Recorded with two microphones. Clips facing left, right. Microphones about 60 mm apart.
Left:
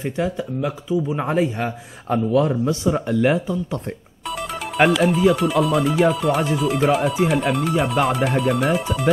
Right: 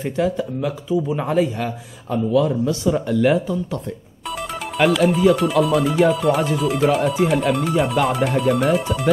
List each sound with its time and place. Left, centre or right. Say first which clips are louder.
0.0 s speech: right 3 dB; centre
2.0 s speech: even; left; by 3.8 s centre
4.3 s music: even; centre
4.8 s speech: right 1 dB; centre